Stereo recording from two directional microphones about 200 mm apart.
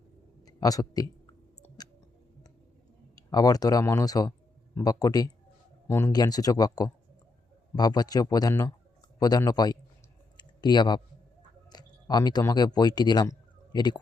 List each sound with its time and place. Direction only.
0.4 s speech: 20° left (ahead or behind)
3.2 s speech: 20° left (ahead or behind)
10.3 s a sound: 20° left (ahead or behind)
11.7 s speech: 20° left (ahead or behind)